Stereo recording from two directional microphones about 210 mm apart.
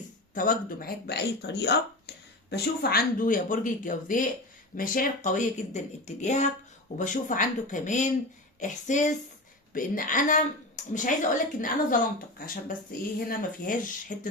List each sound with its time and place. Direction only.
0.3 s a woman's voice: 40° left (ahead or behind)